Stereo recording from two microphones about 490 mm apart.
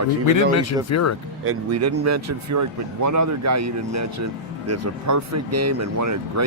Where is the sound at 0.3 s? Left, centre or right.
Left.